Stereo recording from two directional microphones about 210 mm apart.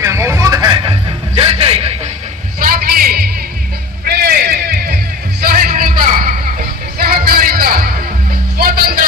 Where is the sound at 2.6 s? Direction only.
45° right (ahead or behind).